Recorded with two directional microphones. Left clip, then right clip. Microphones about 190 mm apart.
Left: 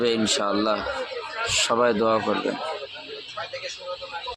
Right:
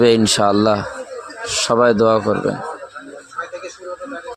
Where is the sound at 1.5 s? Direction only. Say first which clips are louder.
Right 7 dB; 35° right (ahead or behind).